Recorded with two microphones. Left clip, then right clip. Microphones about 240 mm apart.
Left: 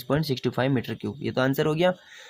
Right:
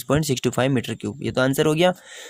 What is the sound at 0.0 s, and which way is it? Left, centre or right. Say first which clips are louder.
Speech: right 4 dB; right.